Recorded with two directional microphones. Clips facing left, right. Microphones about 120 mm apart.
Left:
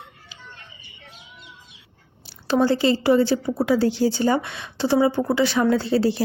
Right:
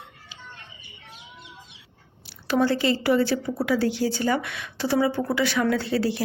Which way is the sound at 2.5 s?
30° left (ahead or behind).